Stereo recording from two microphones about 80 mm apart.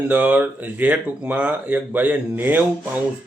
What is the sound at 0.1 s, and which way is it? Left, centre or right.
Speech, centre.